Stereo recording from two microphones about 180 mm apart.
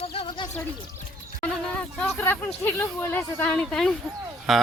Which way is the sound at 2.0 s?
10° left (ahead or behind).